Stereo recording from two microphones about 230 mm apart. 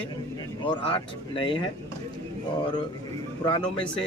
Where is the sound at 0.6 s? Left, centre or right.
Left.